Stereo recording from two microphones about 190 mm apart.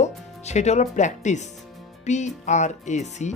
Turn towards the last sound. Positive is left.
turn(degrees=40)  # may be behind; listen again after turning